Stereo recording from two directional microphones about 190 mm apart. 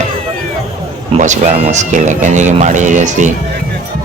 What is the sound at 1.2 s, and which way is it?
Speech, 40° right (ahead or behind).